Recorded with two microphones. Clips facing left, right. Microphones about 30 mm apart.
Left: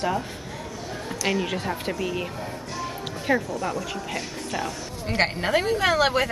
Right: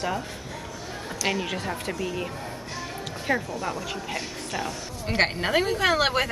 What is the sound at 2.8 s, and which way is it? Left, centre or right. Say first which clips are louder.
Music: left 4 dB; centre.